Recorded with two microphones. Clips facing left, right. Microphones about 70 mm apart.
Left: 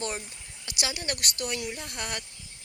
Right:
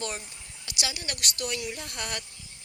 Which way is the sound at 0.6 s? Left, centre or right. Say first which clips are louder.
Left 2 dB; left.